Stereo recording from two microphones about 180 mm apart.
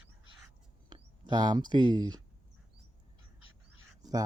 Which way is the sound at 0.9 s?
25° right (ahead or behind).